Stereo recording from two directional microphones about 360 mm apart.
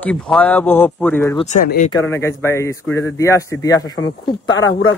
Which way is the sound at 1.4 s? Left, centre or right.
Left.